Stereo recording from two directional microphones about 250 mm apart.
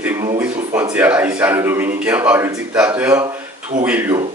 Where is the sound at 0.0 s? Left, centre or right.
Centre.